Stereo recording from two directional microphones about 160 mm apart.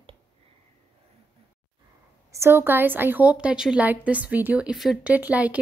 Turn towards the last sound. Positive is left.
turn(degrees=-10)  # may be behind; listen again after turning